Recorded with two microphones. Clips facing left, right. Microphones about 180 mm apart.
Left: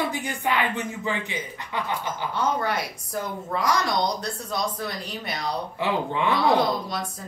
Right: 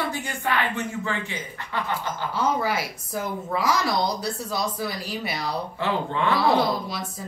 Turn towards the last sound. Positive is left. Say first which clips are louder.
# even
turn(degrees=-5)  # may be behind; listen again after turning